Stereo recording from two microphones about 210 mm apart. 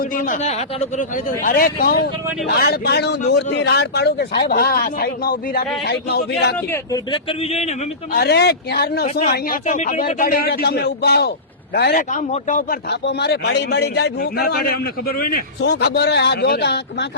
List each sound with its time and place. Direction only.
0.0 s a man's voice: 40° left (ahead or behind)
6.7 s a man's voice: 20° left (ahead or behind)
8.2 s a man's voice: 50° left (ahead or behind)
9.0 s a man's voice: 30° left (ahead or behind); by 17.1 s 55° left (ahead or behind)